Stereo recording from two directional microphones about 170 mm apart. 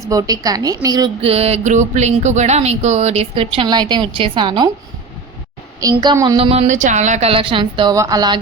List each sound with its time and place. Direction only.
0.0 s a woman's voice: 20° right (ahead or behind)
1.2 s speech: 35° right (ahead or behind)
5.8 s speech: 25° right (ahead or behind)